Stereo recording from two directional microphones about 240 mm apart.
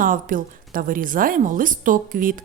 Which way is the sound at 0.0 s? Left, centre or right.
Right.